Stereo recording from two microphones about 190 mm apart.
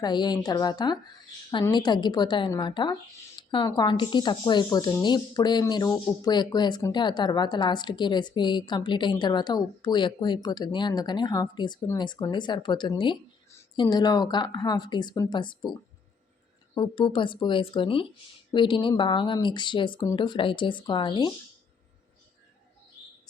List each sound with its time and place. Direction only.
0.0 s speech: 20° left (ahead or behind)